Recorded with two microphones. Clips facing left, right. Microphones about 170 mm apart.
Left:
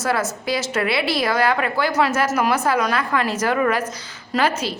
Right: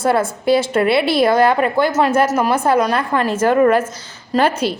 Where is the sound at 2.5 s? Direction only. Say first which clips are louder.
Right 4 dB; 30° right (ahead or behind).